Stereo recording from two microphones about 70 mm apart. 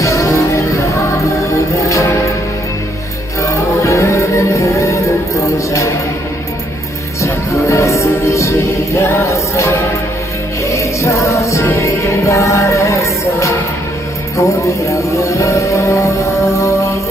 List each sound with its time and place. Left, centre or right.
0.0 s music: left
3.4 s music: left
7.2 s music: left